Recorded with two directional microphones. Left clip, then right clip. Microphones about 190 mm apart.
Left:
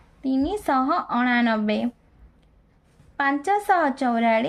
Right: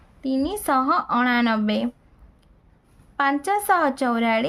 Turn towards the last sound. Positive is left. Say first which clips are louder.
# left 1 dB
turn(degrees=-25)  # may be behind; listen again after turning